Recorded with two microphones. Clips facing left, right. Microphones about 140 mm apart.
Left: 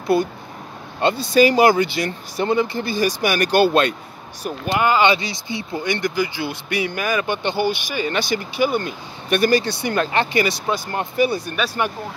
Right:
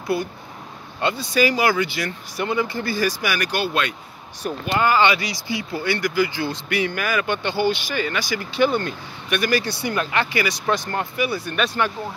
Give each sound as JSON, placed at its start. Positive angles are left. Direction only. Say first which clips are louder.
{"t": 1.0, "sound": "speech", "louder": "left 5 dB", "side_deg": 30}
{"t": 4.6, "sound": "speech", "louder": "left 2 dB", "side_deg": 20}
{"t": 8.1, "sound": "speech", "louder": "left 4 dB", "side_deg": 25}
{"t": 8.5, "sound": "speech", "louder": "right 2 dB", "side_deg": 10}
{"t": 9.3, "sound": "speech", "louder": "left 5 dB", "side_deg": 35}
{"t": 9.6, "sound": "speech", "louder": "left 3 dB", "side_deg": 20}
{"t": 11.5, "sound": "speech", "louder": "right 1 dB", "side_deg": 5}